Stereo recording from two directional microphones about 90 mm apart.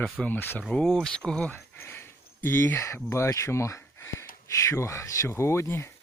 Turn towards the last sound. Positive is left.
turn(degrees=30)  # may be behind; listen again after turning